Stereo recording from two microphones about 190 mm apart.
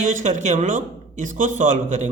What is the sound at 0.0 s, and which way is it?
A man's voice, 40° right (ahead or behind).